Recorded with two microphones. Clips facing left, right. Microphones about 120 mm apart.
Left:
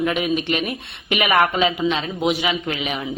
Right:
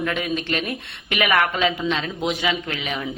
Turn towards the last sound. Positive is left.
turn(degrees=20)  # may be behind; listen again after turning